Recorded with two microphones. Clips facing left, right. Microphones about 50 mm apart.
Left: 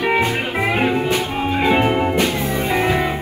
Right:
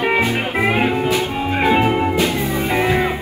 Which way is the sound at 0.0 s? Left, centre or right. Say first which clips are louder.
Even; right.